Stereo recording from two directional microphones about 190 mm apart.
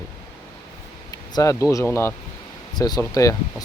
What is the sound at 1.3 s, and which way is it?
Speech, 15° left (ahead or behind).